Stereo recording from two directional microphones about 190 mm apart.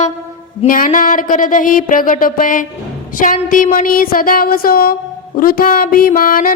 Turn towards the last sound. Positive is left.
turn(degrees=45)  # may be behind; listen again after turning